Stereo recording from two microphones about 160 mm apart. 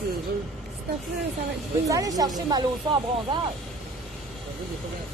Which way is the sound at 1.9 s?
20° right (ahead or behind).